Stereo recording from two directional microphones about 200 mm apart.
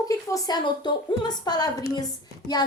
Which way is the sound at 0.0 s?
15° left (ahead or behind).